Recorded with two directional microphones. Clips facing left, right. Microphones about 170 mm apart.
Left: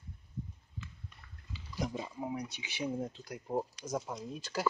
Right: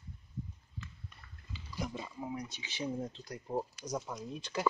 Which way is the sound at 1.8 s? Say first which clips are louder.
Left 3 dB; 15° left (ahead or behind).